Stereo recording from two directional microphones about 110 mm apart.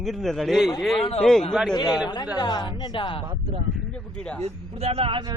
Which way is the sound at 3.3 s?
55° right (ahead or behind).